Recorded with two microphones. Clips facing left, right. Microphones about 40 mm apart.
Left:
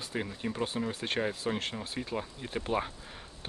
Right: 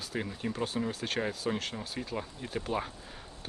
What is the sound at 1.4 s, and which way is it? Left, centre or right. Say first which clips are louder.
Speech: even; centre.